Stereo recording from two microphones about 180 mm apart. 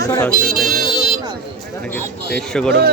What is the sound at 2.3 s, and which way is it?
Speech, 5° left (ahead or behind).